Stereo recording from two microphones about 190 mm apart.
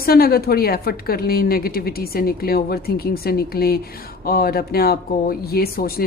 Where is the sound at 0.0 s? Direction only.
50° left (ahead or behind).